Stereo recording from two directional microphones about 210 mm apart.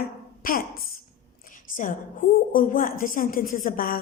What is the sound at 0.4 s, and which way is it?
Speech, 45° left (ahead or behind).